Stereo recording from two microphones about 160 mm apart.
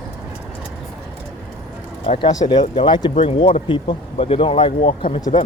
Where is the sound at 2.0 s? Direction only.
30° left (ahead or behind).